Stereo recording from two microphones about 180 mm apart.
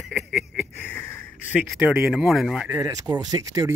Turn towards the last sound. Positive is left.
turn(degrees=-20)  # may be behind; listen again after turning